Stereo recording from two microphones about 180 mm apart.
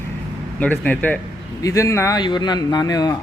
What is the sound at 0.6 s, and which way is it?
Speech, 10° left (ahead or behind).